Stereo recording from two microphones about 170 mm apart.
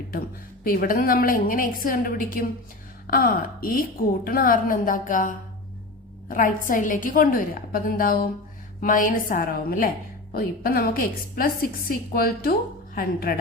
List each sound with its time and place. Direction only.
0.6 s a woman's voice: 55° left (ahead or behind)